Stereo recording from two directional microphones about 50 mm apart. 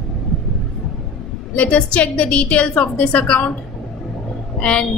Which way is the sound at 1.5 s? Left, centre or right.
Left.